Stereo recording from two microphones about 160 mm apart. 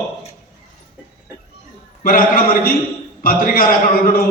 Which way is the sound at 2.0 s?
60° left (ahead or behind).